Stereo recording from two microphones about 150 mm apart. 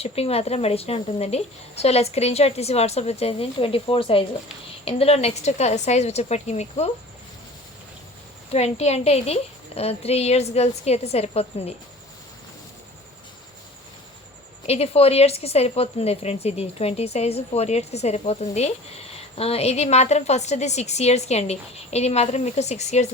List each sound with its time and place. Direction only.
0.0 s speech: 40° left (ahead or behind)
8.5 s speech: 45° left (ahead or behind)
14.7 s speech: 40° left (ahead or behind)